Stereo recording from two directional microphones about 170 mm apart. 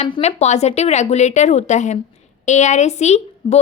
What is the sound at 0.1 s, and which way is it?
A woman's voice, 40° left (ahead or behind).